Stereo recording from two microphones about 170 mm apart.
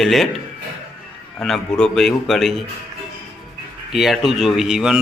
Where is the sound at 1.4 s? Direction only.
Centre (ahead or behind).